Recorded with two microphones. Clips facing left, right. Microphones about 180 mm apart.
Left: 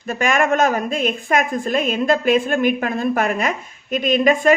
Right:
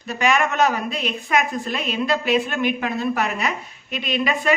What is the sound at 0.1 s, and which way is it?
A man's voice, 50° left (ahead or behind).